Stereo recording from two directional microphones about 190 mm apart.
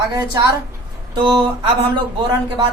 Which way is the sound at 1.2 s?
25° right (ahead or behind).